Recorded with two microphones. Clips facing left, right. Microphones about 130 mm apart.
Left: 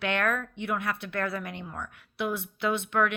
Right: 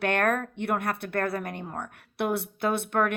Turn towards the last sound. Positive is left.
turn(degrees=-50)  # may be behind; listen again after turning